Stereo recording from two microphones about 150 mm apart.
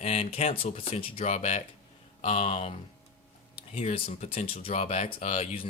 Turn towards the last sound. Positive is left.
turn(degrees=45)  # may be behind; listen again after turning